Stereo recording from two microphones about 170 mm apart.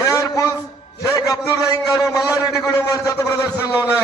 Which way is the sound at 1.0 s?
20° left (ahead or behind).